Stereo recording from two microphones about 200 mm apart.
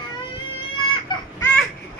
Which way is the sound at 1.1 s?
20° left (ahead or behind).